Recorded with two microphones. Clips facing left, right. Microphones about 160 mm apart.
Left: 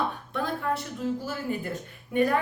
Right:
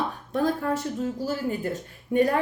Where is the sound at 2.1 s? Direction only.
35° right (ahead or behind).